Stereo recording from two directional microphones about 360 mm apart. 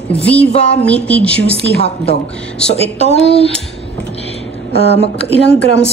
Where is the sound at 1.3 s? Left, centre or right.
Left.